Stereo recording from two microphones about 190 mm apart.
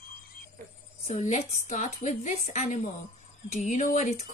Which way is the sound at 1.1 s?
40° left (ahead or behind).